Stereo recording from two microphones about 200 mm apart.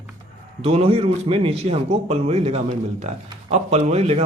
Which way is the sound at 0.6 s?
30° right (ahead or behind).